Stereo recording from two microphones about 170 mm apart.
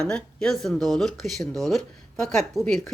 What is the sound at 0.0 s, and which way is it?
A woman's voice, 5° left (ahead or behind).